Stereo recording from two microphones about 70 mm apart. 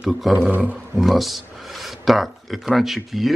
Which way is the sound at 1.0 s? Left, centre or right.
Centre.